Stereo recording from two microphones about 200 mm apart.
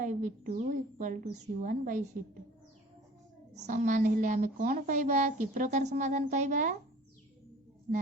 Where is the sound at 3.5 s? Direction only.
35° right (ahead or behind).